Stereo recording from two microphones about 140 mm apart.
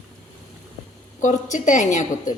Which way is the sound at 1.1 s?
65° left (ahead or behind).